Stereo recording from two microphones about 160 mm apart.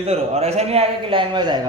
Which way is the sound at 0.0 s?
40° right (ahead or behind).